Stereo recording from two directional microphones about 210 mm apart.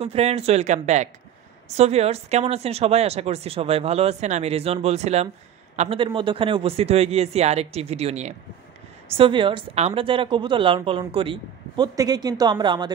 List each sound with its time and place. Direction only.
0.0 s a woman's voice: 30° right (ahead or behind)